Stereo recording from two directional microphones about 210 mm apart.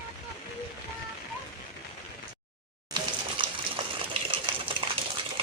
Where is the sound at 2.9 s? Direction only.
25° right (ahead or behind).